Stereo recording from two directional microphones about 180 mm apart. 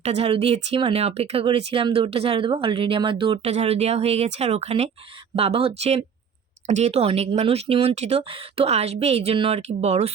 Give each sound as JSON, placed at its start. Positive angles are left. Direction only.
{"t": 0.0, "sound": "speech", "side_deg": -35}